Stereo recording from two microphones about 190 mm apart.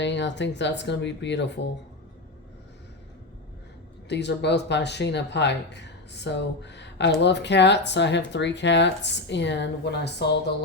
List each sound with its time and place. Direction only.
0.0 s speech: 70° left (ahead or behind)
4.1 s speech: 65° left (ahead or behind)